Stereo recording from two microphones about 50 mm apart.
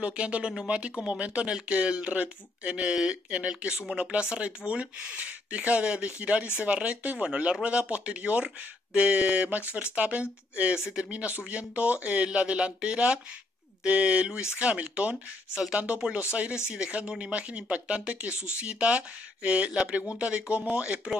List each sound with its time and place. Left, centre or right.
0.0 s speech: right